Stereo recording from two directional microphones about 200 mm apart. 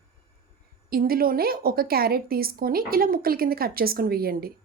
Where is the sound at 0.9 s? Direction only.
50° right (ahead or behind).